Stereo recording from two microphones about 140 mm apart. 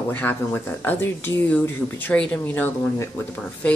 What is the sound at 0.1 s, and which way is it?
Speech, 15° left (ahead or behind).